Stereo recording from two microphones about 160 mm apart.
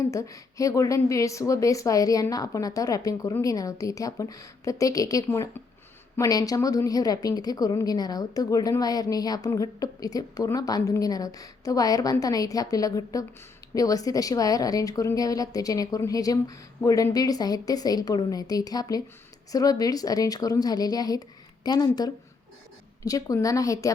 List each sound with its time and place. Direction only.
0.1 s a woman's voice: 20° left (ahead or behind)